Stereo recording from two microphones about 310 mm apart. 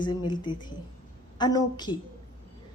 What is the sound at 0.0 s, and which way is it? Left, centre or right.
A woman's voice, centre.